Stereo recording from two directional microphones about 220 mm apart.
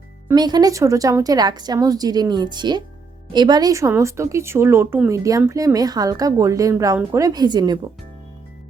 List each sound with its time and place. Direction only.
0.3 s speech: 20° right (ahead or behind)